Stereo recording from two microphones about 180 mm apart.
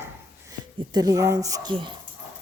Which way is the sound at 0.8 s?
20° right (ahead or behind).